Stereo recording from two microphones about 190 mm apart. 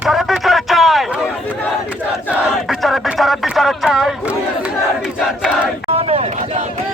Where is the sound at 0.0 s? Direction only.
Centre (ahead or behind).